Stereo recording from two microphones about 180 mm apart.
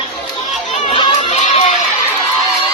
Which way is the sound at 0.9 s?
35° left (ahead or behind).